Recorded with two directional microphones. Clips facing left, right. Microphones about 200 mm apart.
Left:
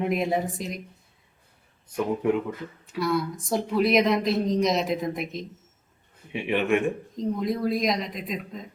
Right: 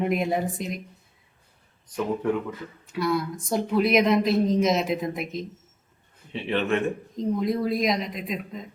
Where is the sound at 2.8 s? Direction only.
Centre (ahead or behind).